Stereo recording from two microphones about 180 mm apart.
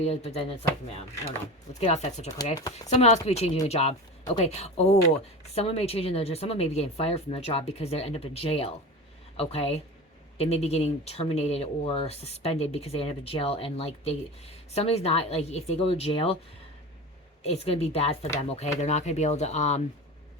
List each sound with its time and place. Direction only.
0.0 s speech: 35° left (ahead or behind)
1.8 s speech: 40° left (ahead or behind)
17.4 s speech: 35° left (ahead or behind)